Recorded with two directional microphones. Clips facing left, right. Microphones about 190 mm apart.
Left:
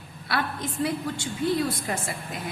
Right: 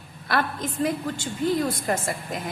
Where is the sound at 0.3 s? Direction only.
45° right (ahead or behind).